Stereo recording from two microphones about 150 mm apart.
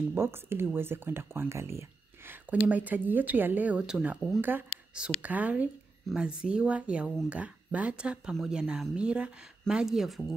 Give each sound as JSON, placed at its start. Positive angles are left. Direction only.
{"t": 0.1, "sound": "speech", "side_deg": -15}